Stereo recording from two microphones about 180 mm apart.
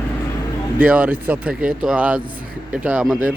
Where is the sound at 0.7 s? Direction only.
10° right (ahead or behind).